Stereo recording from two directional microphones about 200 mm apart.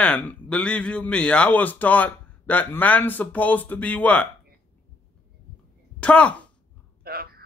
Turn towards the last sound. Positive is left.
turn(degrees=-50)  # may be behind; listen again after turning